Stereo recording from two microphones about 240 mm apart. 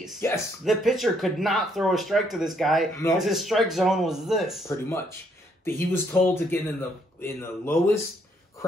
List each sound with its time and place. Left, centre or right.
0.7 s speech: centre
4.6 s speech: centre